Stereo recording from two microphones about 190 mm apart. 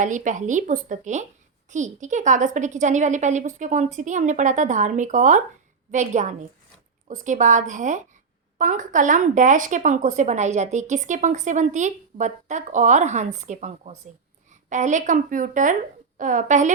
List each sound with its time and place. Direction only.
0.0 s a woman's voice: 40° right (ahead or behind)